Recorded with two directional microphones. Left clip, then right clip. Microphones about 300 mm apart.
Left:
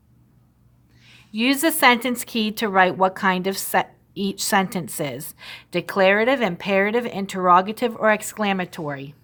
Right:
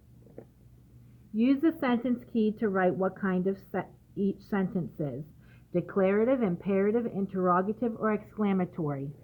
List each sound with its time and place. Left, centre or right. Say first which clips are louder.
1.4 s speech: left 8 dB; left